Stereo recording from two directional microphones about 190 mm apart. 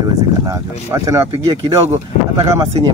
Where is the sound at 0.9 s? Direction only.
15° right (ahead or behind).